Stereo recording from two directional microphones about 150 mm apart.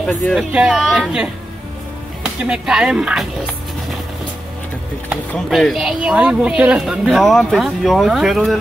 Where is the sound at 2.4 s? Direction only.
5° right (ahead or behind).